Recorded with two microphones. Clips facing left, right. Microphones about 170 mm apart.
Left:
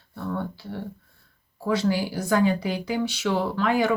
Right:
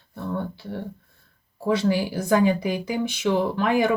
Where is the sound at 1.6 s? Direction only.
25° right (ahead or behind).